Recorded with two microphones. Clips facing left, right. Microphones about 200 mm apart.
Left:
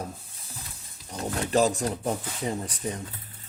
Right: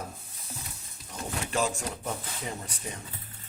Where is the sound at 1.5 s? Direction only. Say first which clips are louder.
Left 7 dB; 35° left (ahead or behind).